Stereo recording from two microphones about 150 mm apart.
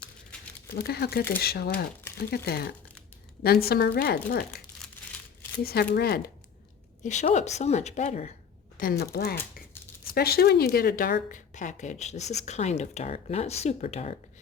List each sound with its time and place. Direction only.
0.7 s a woman's voice: 90° left
4.8 s crumpling: 5° left (ahead or behind)
5.6 s a woman's voice: 90° left
7.0 s a woman's voice: 50° left (ahead or behind)
8.8 s speech: 85° left
10.1 s a woman's voice: 90° left; by 14.2 s 50° left (ahead or behind)